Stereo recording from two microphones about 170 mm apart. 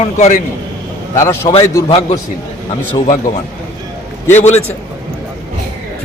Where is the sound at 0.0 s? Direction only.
45° left (ahead or behind).